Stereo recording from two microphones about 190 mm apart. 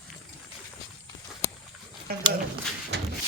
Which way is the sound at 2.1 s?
55° right (ahead or behind).